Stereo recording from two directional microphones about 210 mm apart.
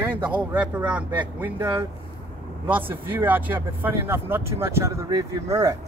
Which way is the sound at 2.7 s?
10° right (ahead or behind).